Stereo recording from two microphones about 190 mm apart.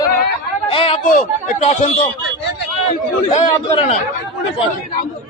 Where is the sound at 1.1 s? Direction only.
40° left (ahead or behind).